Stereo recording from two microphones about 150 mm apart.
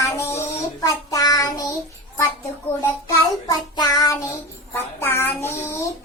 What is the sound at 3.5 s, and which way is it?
Child singing, 25° left (ahead or behind).